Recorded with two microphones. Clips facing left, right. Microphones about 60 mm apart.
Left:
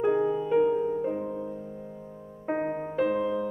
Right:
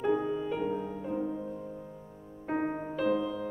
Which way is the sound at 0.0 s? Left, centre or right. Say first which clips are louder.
Left 5 dB; left.